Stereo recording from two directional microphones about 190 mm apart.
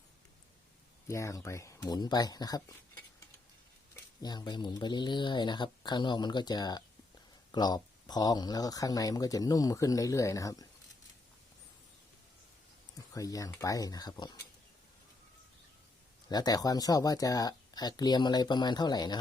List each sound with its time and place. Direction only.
1.0 s speech: 15° left (ahead or behind)
4.2 s speech: 20° left (ahead or behind)
13.1 s speech: 20° left (ahead or behind)
16.3 s speech: 20° left (ahead or behind)